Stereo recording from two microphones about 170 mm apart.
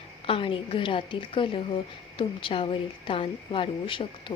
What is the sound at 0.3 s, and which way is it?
A woman's voice, 30° left (ahead or behind).